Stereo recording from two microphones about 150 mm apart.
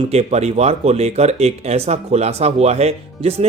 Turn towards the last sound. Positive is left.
turn(degrees=-45)  # may be behind; listen again after turning